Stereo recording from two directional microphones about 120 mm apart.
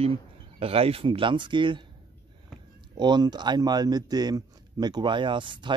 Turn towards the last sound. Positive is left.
turn(degrees=-40)  # may be behind; listen again after turning